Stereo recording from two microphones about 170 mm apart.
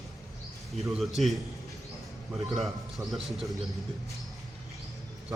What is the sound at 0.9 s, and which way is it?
Speech, centre (ahead or behind).